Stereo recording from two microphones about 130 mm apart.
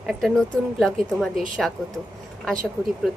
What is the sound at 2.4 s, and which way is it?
Speech, 5° left (ahead or behind).